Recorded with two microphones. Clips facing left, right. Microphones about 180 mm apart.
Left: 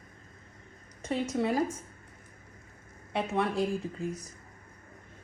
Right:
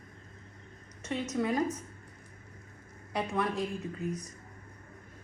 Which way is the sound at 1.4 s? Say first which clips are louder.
Even; 30° left (ahead or behind).